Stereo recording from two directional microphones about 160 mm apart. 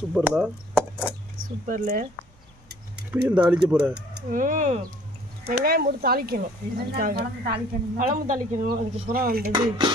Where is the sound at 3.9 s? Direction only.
90° right.